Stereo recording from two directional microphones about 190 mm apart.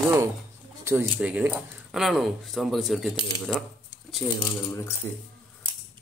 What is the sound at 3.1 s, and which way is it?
Speech, 20° left (ahead or behind).